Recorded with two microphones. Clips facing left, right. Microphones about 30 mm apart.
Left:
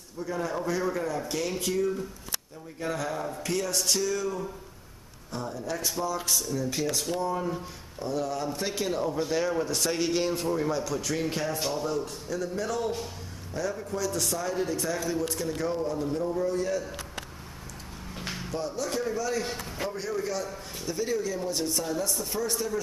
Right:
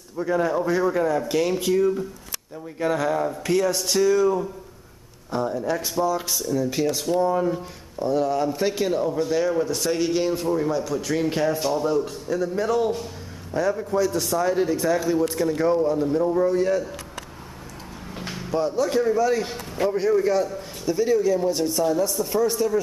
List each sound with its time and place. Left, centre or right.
0.2 s speech: right
5.9 s speech: centre
18.1 s a sound: centre
18.5 s speech: centre
20.4 s speech: centre